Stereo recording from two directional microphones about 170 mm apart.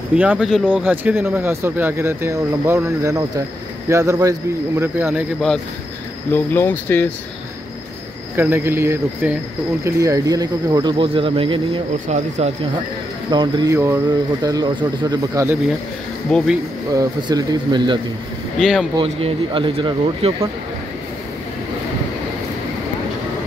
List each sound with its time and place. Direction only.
0.1 s speech: 5° right (ahead or behind)
6.3 s speech: 10° left (ahead or behind)
8.4 s speech: 15° right (ahead or behind); by 12.5 s 40° right (ahead or behind)
13.3 s speech: 25° right (ahead or behind)
16.3 s speech: 5° left (ahead or behind)
16.9 s speech: 20° right (ahead or behind)
18.6 s speech: centre (ahead or behind)
19.0 s speech: 35° right (ahead or behind)